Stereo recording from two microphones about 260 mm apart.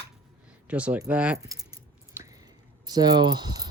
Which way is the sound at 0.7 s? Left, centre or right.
Centre.